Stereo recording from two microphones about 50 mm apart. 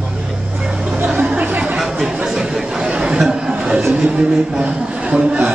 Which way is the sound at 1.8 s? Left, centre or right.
Centre.